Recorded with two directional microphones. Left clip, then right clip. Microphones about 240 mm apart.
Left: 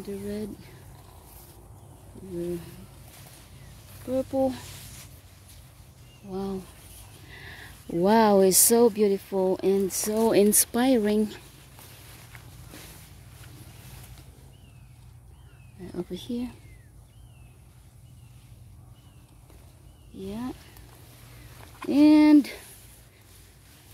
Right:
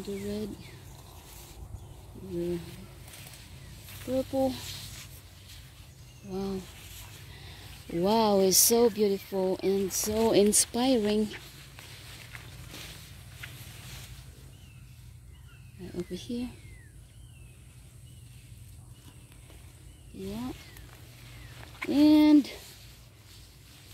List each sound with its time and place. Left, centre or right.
0.0 s speech: centre
4.0 s speech: centre
6.3 s speech: centre
7.3 s speech: centre
16.1 s speech: centre
20.2 s speech: centre
21.9 s speech: centre